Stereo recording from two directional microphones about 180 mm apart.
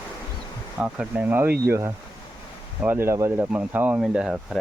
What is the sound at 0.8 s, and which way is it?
Speech, 5° right (ahead or behind).